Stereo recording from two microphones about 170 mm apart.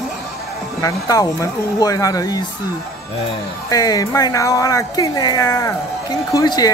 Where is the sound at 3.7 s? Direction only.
20° left (ahead or behind).